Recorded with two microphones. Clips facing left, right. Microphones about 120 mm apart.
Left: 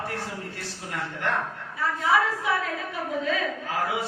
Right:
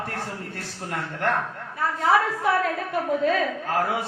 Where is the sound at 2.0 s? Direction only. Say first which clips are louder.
Right 3 dB; 55° right (ahead or behind).